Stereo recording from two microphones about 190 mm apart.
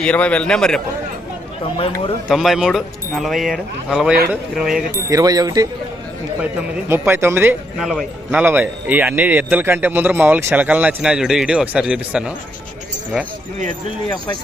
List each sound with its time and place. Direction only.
0.0 s speech: 5° left (ahead or behind)
2.3 s speech: centre (ahead or behind)
5.0 s speech: 20° right (ahead or behind)
6.8 s a man's voice: 10° right (ahead or behind)
7.8 s a man's voice: centre (ahead or behind)